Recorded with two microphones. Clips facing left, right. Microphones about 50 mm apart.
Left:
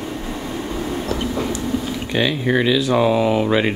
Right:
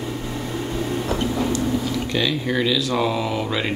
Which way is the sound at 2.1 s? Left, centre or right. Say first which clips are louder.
Left 5 dB; left.